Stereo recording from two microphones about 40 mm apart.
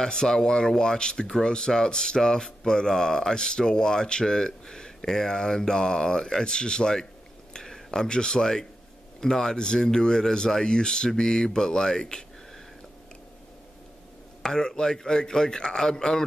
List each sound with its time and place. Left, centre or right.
0.0 s speech: centre
14.4 s speech: centre